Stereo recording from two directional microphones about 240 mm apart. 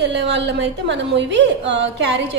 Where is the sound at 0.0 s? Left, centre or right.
Right.